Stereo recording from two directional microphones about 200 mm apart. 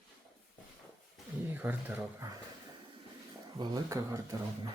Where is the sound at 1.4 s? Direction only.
10° right (ahead or behind).